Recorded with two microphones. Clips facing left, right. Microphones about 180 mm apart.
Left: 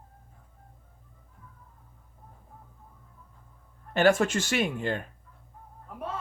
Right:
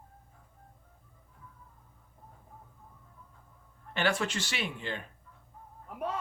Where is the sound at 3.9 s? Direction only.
45° left (ahead or behind).